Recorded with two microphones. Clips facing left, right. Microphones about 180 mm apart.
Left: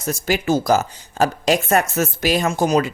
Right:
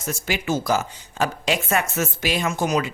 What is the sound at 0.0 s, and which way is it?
Speech, 40° left (ahead or behind).